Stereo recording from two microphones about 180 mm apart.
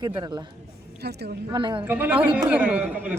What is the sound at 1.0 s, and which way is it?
Speech, 65° right (ahead or behind).